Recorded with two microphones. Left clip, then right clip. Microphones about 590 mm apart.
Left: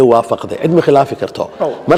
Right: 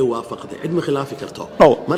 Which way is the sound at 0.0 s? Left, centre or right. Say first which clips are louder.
Left 11 dB; left.